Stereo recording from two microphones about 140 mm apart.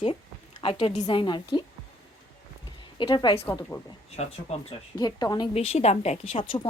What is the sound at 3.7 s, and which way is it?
Speech, 25° left (ahead or behind).